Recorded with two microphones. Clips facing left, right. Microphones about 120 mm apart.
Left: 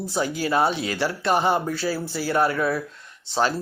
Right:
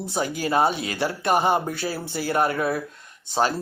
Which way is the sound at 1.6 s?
55° right (ahead or behind).